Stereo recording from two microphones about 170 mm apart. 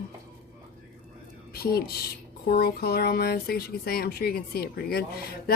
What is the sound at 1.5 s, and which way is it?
Speech, 65° left (ahead or behind).